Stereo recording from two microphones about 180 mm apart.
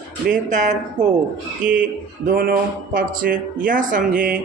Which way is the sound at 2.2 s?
55° right (ahead or behind).